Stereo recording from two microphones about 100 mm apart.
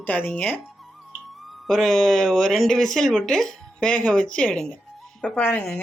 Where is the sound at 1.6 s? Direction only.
5° left (ahead or behind).